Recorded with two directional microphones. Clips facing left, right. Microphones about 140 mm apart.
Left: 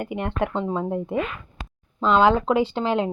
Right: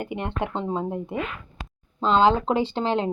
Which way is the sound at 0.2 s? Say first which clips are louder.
Left 5 dB; 25° right (ahead or behind).